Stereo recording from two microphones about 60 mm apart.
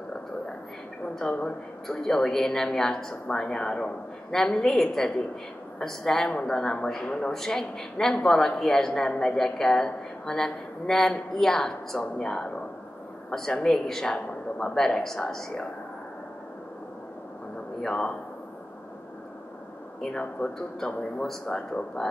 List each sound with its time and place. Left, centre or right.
1.4 s a woman's voice: centre
17.8 s a man's voice: centre
20.0 s a woman's voice: centre